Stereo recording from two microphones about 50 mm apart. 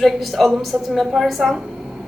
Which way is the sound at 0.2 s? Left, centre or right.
Centre.